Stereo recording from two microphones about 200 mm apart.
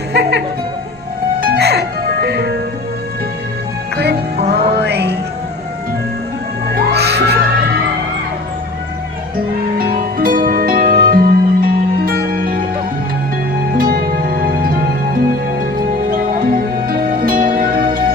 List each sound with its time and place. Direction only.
0.1 s music: 55° right (ahead or behind)
3.9 s music: 55° right (ahead or behind)
6.7 s music: 55° right (ahead or behind)
9.7 s music: 45° right (ahead or behind)
13.7 s music: 45° right (ahead or behind)